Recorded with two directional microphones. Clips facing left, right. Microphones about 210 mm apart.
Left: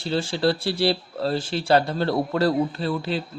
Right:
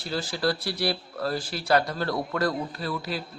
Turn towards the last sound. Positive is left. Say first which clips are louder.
# left 5 dB
turn(degrees=25)  # may be behind; listen again after turning